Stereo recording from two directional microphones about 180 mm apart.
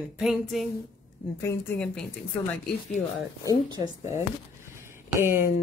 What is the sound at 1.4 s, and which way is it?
Speech, 10° left (ahead or behind).